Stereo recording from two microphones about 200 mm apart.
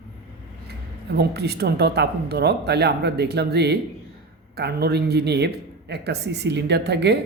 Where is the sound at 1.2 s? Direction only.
55° right (ahead or behind).